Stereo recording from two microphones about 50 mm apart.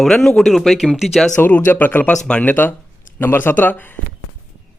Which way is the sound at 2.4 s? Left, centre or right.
Left.